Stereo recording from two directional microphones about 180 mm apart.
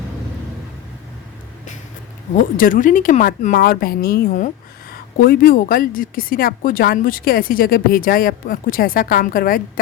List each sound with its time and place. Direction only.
2.4 s a woman's voice: 50° left (ahead or behind)